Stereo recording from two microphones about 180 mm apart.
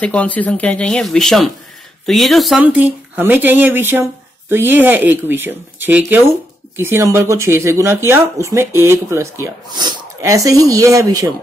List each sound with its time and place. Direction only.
0.0 s speech: 5° left (ahead or behind); by 11.3 s 20° right (ahead or behind)